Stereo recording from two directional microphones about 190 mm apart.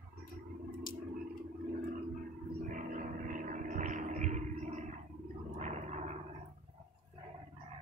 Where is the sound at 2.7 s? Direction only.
45° right (ahead or behind).